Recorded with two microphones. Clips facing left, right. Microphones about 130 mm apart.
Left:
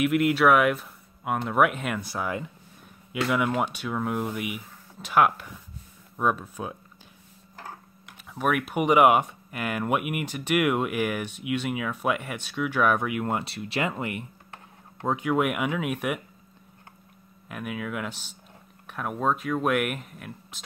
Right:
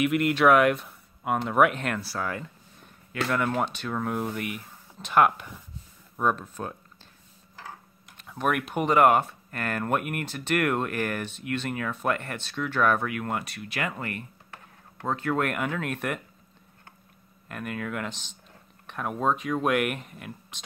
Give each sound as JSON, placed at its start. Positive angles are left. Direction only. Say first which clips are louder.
{"t": 0.0, "sound": "speech", "louder": "left 1 dB", "side_deg": 0}
{"t": 2.0, "sound": "speech", "louder": "left 1 dB", "side_deg": 15}
{"t": 8.2, "sound": "speech", "louder": "left 1 dB", "side_deg": 5}
{"t": 17.5, "sound": "speech", "louder": "even", "side_deg": 5}